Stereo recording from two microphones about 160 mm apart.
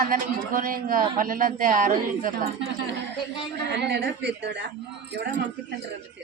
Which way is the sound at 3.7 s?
90° right.